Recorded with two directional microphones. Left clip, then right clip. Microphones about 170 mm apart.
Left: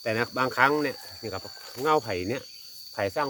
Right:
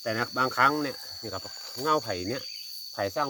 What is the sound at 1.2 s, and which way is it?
Speech, 35° left (ahead or behind).